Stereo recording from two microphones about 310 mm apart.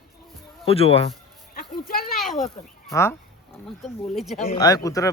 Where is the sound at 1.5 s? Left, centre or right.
Left.